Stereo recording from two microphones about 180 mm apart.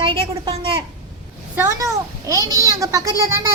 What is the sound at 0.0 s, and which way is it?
Speech, 30° right (ahead or behind).